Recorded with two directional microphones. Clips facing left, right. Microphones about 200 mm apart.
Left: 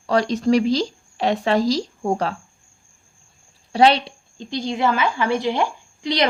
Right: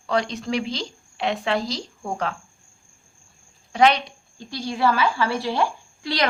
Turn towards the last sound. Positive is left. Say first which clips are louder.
# left 4 dB
turn(degrees=20)  # may be behind; listen again after turning